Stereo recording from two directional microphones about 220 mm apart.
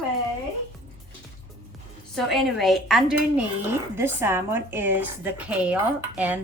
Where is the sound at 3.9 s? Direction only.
10° right (ahead or behind).